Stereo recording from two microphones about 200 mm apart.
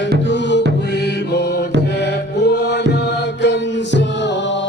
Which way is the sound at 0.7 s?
60° left (ahead or behind).